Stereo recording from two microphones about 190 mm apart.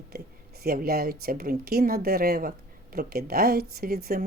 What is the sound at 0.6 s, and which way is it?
Speech, 50° right (ahead or behind).